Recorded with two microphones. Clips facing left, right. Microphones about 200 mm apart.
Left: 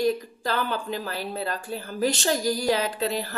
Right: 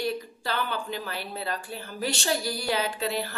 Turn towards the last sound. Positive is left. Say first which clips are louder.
# left 2 dB
turn(degrees=40)  # may be behind; listen again after turning